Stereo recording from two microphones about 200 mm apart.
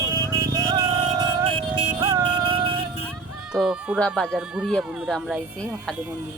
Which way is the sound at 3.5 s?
5° right (ahead or behind).